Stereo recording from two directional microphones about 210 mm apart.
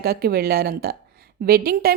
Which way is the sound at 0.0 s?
50° right (ahead or behind).